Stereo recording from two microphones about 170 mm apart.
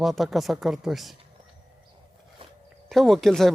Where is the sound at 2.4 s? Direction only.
30° right (ahead or behind).